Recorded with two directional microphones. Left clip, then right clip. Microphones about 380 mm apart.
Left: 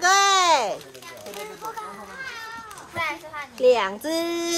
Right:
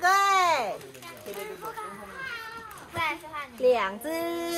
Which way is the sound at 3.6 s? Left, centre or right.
Left.